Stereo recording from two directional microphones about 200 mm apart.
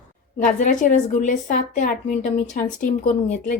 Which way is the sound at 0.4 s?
40° left (ahead or behind).